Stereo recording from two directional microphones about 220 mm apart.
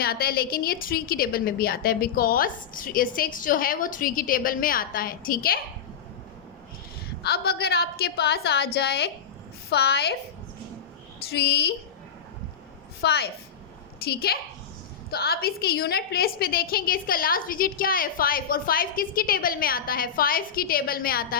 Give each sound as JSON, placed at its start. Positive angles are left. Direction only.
{"t": 0.0, "sound": "a woman's voice", "side_deg": 45}
{"t": 7.2, "sound": "a woman's voice", "side_deg": 45}
{"t": 11.3, "sound": "a woman's voice", "side_deg": 50}
{"t": 13.0, "sound": "a woman's voice", "side_deg": 45}